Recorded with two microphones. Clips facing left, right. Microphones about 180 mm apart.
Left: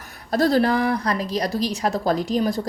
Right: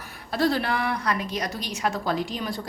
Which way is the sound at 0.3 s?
40° left (ahead or behind).